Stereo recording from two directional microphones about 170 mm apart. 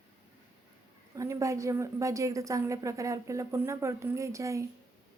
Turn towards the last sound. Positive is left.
turn(degrees=-20)  # may be behind; listen again after turning